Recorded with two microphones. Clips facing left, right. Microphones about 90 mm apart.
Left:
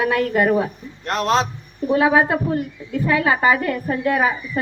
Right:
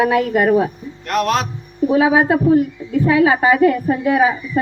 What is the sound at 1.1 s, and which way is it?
Speech, 30° left (ahead or behind).